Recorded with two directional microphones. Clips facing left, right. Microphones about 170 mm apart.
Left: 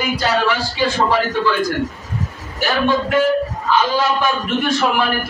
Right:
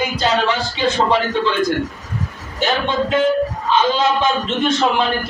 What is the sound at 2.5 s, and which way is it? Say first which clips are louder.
A man's voice: left 1 dB; 20° right (ahead or behind).